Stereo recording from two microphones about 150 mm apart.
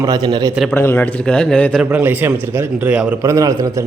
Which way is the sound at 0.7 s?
15° left (ahead or behind).